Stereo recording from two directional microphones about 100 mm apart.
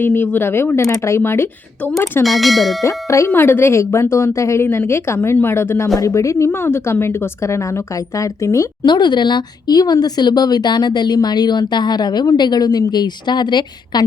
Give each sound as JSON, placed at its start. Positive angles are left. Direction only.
{"t": 0.0, "sound": "speech", "side_deg": 20}
{"t": 2.2, "sound": "speech", "side_deg": 0}
{"t": 2.8, "sound": "speech", "side_deg": 30}
{"t": 8.9, "sound": "speech", "side_deg": 50}